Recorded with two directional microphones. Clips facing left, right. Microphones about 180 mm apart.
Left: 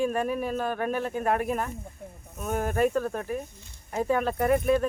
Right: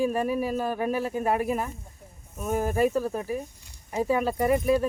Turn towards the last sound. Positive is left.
turn(degrees=-5)  # may be behind; listen again after turning